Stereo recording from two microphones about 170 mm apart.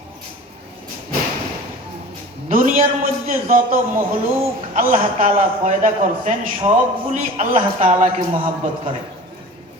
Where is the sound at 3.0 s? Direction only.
55° right (ahead or behind).